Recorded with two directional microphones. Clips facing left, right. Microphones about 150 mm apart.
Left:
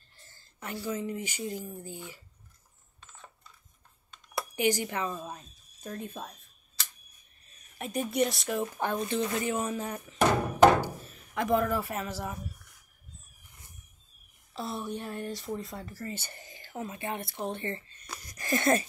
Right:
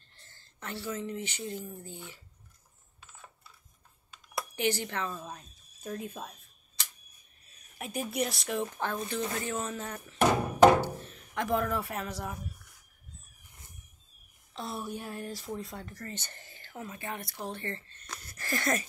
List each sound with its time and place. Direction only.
0.1 s speech: 10° left (ahead or behind)
3.0 s coin: 5° right (ahead or behind)
4.6 s speech: 10° left (ahead or behind)
5.8 s speech: 5° right (ahead or behind)
7.8 s speech: centre (ahead or behind)
8.7 s speech: 20° left (ahead or behind); by 12.4 s centre (ahead or behind)
14.5 s speech: centre (ahead or behind); by 18.9 s 25° left (ahead or behind)